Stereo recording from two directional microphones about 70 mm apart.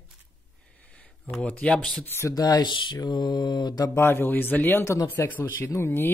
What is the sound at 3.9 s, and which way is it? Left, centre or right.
Speech, left.